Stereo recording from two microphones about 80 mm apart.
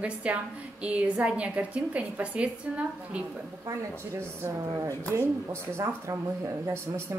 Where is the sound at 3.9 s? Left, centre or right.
Right.